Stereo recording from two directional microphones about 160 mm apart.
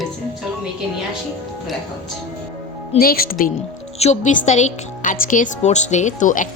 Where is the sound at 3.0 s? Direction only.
65° left (ahead or behind).